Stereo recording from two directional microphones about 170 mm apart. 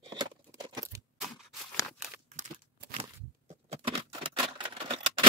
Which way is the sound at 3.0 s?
35° right (ahead or behind).